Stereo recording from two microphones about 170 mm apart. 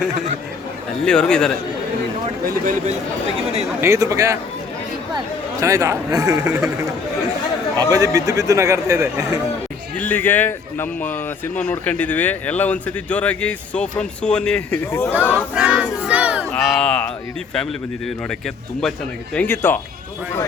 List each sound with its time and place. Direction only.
1.0 s a man's voice: 5° left (ahead or behind)
3.8 s a man's voice: 15° right (ahead or behind)
7.8 s a man's voice: 20° right (ahead or behind)
10.0 s speech: 10° left (ahead or behind)
15.5 s battle cry: 5° right (ahead or behind)
16.6 s a man's voice: 5° left (ahead or behind)